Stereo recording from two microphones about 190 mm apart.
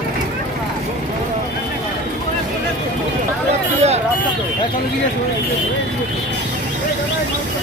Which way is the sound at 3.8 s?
35° right (ahead or behind).